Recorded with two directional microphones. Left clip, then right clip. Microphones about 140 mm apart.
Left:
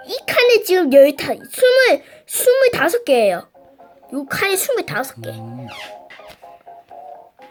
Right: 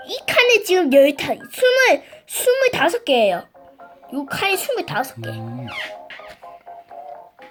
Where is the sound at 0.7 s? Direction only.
30° left (ahead or behind).